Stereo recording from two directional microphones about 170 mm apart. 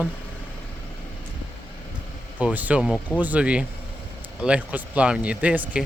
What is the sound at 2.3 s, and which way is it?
Speech, 10° right (ahead or behind).